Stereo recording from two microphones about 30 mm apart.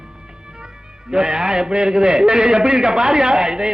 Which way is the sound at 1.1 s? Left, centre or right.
Right.